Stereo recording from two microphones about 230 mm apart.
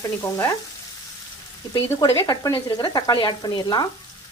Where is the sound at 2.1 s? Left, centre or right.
Centre.